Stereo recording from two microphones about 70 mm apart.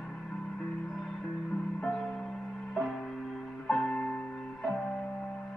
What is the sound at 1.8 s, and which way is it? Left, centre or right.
Music, centre.